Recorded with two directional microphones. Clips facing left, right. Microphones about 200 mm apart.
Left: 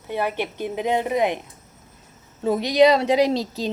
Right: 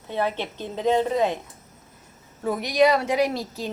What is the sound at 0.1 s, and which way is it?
A woman's voice, 10° left (ahead or behind).